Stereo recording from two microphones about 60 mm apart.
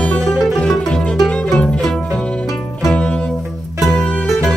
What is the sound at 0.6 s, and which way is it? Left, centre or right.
Music, centre.